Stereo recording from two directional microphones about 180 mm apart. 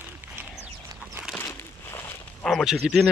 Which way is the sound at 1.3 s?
15° left (ahead or behind).